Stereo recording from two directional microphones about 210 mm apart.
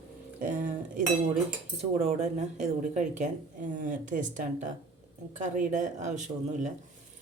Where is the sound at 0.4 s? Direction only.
40° right (ahead or behind).